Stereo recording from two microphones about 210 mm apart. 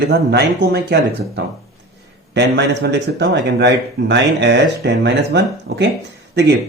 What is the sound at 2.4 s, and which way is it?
Speech, 55° right (ahead or behind).